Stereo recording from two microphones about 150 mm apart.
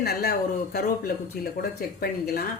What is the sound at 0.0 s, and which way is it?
Speech, 90° left.